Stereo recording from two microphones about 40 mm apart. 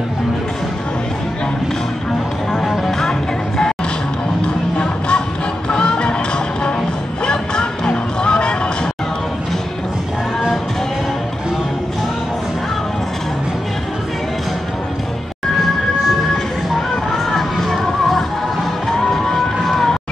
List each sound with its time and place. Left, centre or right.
3.0 s music: centre
4.7 s music: left
7.2 s music: left
17.3 s music: centre